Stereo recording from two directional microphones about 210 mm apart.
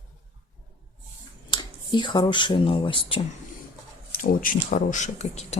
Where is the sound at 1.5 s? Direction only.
20° left (ahead or behind).